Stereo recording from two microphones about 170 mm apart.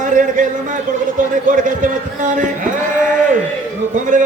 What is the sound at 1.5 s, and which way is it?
Speech, 50° right (ahead or behind).